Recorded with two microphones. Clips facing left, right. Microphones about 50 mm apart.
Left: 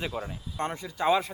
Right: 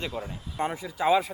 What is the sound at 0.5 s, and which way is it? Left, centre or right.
Speech, centre.